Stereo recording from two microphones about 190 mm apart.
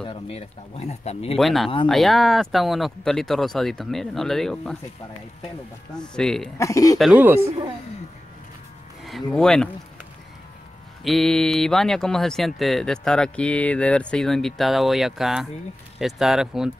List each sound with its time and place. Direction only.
0.0 s speech: 30° left (ahead or behind)
1.4 s speech: centre (ahead or behind)
5.9 s speech: 5° left (ahead or behind)
6.6 s speech: 15° left (ahead or behind)
7.0 s speech: 5° right (ahead or behind)
9.3 s speech: 5° left (ahead or behind)
11.1 s speech: centre (ahead or behind)